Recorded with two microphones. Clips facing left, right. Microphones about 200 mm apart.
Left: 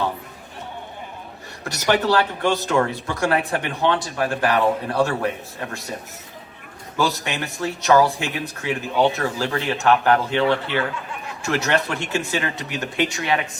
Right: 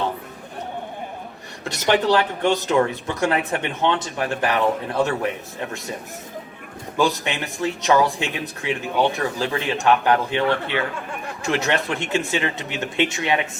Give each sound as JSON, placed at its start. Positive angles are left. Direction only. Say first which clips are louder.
{"t": 1.8, "sound": "speech", "louder": "right 1 dB", "side_deg": -20}
{"t": 6.9, "sound": "speech", "louder": "right 2 dB", "side_deg": -20}